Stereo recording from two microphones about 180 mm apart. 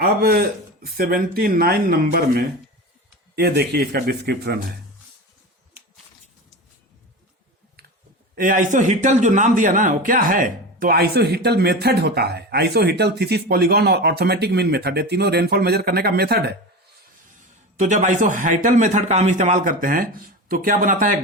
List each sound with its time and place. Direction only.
0.0 s speech: 55° right (ahead or behind)
8.4 s speech: 50° right (ahead or behind)
17.7 s a man's voice: 40° right (ahead or behind)